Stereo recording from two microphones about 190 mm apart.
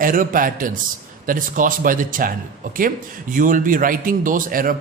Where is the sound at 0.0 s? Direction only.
45° right (ahead or behind).